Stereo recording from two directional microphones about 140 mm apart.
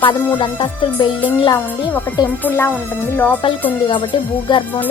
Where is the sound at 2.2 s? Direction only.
15° left (ahead or behind).